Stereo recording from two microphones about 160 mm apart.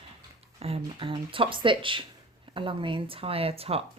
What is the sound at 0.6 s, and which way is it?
Speech, 35° right (ahead or behind).